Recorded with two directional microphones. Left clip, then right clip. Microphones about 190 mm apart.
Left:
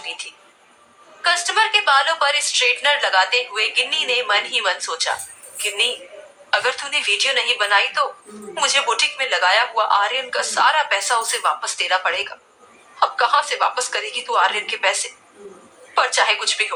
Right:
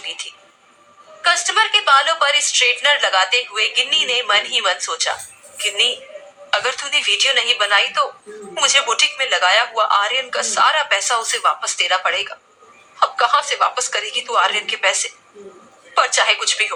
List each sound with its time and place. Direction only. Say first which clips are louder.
1.2 s a woman's voice: right 2 dB; 15° right (ahead or behind)